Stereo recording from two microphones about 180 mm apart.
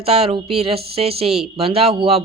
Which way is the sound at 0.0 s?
30° right (ahead or behind).